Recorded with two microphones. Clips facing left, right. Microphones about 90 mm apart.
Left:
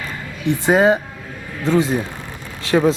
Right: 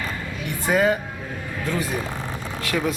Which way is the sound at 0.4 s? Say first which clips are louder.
Left 6 dB; 25° left (ahead or behind).